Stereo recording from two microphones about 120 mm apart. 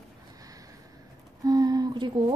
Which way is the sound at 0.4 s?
30° right (ahead or behind).